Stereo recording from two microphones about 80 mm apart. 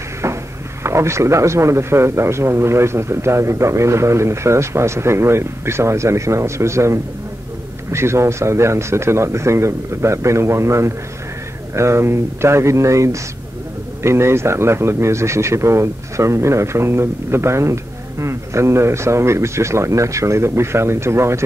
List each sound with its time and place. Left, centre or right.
0.8 s a man's voice: right